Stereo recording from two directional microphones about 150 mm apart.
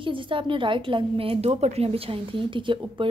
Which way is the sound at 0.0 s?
35° right (ahead or behind).